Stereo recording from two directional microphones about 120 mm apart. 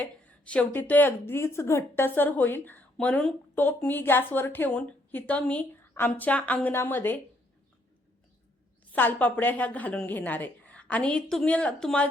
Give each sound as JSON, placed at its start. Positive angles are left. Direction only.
{"t": 0.0, "sound": "a woman's voice", "side_deg": 10}
{"t": 8.9, "sound": "a woman's voice", "side_deg": 15}